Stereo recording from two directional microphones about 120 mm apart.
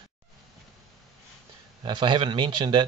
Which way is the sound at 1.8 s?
40° right (ahead or behind).